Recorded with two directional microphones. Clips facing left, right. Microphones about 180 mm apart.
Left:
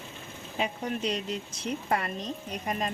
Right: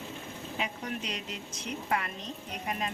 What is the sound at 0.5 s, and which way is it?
Speech, 35° left (ahead or behind).